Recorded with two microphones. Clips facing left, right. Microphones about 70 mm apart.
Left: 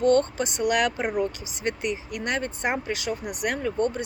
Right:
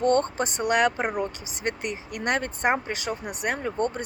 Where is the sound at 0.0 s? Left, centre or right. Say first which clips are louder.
Left 2 dB; right.